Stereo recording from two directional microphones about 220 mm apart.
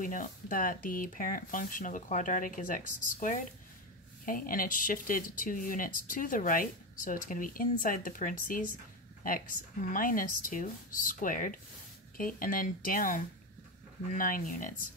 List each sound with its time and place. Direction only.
0.0 s speech: 35° left (ahead or behind)
9.8 s speech: 40° left (ahead or behind)